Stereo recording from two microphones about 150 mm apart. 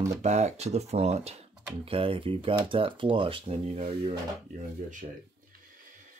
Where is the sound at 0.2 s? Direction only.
50° right (ahead or behind).